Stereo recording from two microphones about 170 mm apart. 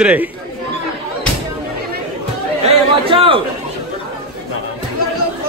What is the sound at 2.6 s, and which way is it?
Chatter, 30° right (ahead or behind).